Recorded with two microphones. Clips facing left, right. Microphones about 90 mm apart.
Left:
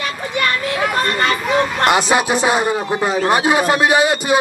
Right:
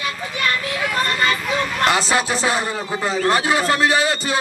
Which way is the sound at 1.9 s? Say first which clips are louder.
Left 3 dB; 20° left (ahead or behind).